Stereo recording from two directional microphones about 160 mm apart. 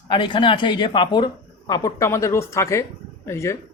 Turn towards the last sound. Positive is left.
turn(degrees=20)  # may be behind; listen again after turning